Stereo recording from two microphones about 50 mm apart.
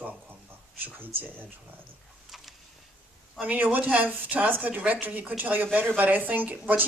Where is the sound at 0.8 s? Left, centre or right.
Right.